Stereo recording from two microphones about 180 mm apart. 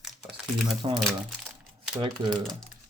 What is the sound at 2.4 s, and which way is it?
Speech, centre (ahead or behind).